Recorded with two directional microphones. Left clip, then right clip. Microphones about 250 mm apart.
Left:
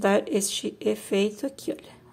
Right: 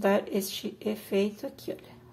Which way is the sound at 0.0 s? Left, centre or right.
Centre.